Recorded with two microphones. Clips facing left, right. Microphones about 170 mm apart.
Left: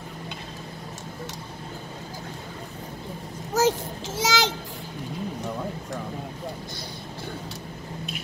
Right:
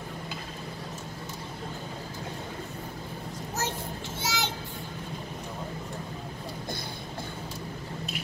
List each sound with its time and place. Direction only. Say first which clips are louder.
3.5 s a child's voice: left 12 dB; 90° left